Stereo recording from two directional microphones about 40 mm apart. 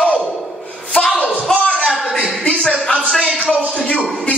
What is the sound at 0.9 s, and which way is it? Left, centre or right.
Speech, left.